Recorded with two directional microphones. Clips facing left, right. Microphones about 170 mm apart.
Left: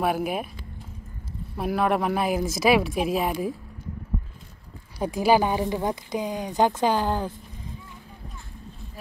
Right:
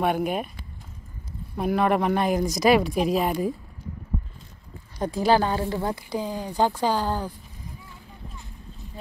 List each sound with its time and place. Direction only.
0.0 s speech: 5° left (ahead or behind)
1.6 s speech: centre (ahead or behind)
4.9 s speech: 10° left (ahead or behind)